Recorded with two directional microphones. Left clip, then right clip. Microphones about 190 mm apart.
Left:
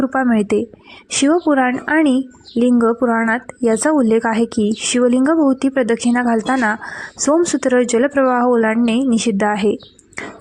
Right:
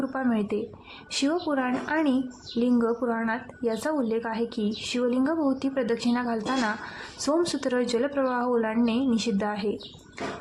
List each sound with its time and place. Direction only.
0.0 s speech: 40° left (ahead or behind)